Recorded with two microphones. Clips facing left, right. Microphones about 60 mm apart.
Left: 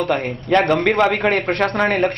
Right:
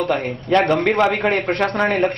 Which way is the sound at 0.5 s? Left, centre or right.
Left.